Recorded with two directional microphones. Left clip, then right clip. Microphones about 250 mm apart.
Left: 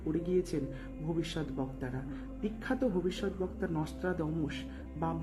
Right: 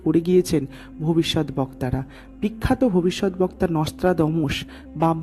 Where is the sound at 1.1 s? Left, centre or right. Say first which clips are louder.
Right 15 dB; right.